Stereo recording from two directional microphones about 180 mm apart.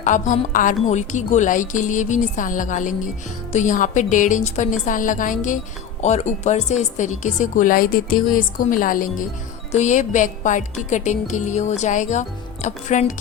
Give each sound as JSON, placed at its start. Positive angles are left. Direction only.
{"t": 0.0, "sound": "a woman's voice", "side_deg": 45}